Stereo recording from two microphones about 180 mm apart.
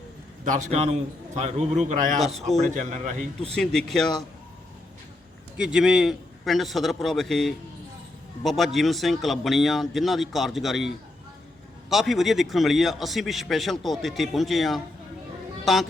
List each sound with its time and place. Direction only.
0.4 s a man's voice: 40° right (ahead or behind)
2.2 s a man's voice: centre (ahead or behind)
2.6 s a man's voice: 40° right (ahead or behind)
3.4 s a man's voice: 5° left (ahead or behind)
5.5 s a man's voice: 5° right (ahead or behind)